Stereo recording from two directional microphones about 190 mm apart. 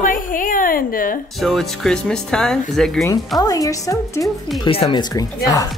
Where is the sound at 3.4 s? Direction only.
20° left (ahead or behind).